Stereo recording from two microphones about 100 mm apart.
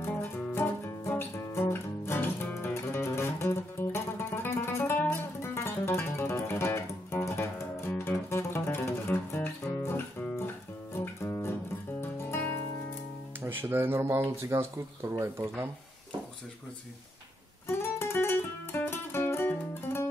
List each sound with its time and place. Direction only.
0.0 s music: 20° left (ahead or behind)
7.9 s music: 15° left (ahead or behind)
8.3 s music: 25° left (ahead or behind)
13.4 s speech: 20° right (ahead or behind)
17.6 s music: 25° left (ahead or behind)